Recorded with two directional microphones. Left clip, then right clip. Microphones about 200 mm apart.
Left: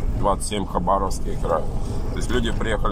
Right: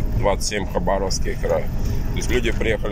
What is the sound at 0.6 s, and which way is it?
Speech, 20° right (ahead or behind).